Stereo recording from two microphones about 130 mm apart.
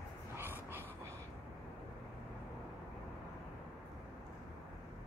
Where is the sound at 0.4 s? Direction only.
15° right (ahead or behind).